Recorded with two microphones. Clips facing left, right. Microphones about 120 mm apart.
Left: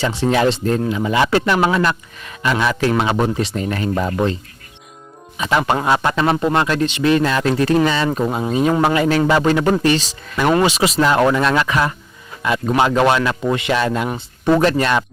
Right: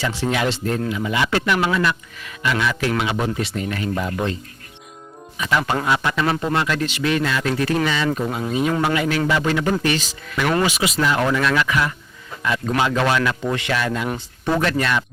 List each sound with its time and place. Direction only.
0.2 s speech: 30° left (ahead or behind)
5.4 s a man's voice: 25° left (ahead or behind)